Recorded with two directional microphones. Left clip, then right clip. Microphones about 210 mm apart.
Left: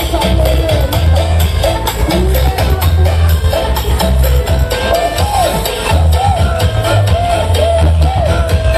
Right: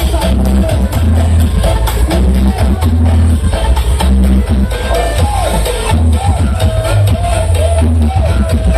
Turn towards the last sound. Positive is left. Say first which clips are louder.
# left 4 dB
turn(degrees=40)  # may be behind; listen again after turning